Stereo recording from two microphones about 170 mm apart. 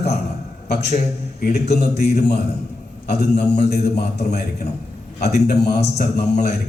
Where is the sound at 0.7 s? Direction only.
70° left (ahead or behind).